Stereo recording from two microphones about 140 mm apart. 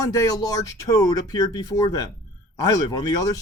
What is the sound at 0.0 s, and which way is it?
Speech, 25° left (ahead or behind).